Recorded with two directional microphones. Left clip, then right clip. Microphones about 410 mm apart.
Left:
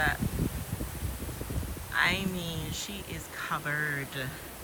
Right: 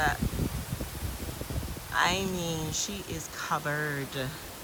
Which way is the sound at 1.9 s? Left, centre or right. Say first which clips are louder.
Right 1 dB; centre.